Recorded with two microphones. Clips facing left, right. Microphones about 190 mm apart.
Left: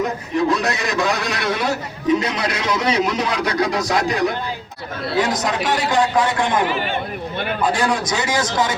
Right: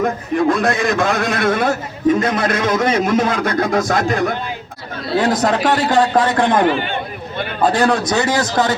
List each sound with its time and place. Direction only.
0.0 s a man's voice: 50° right (ahead or behind)
5.2 s a man's voice: 55° right (ahead or behind)
7.7 s a man's voice: 60° right (ahead or behind)